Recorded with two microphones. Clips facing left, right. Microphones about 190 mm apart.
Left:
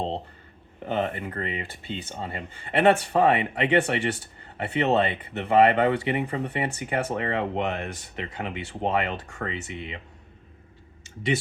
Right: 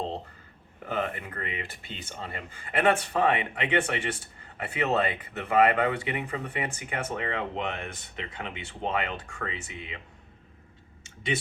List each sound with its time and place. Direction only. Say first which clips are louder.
0.9 s speech: left 4 dB; 30° left (ahead or behind)